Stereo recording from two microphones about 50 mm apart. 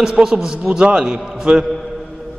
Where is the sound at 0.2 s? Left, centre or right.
Centre.